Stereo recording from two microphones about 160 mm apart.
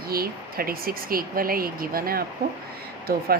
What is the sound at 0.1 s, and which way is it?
Speech, 70° right (ahead or behind).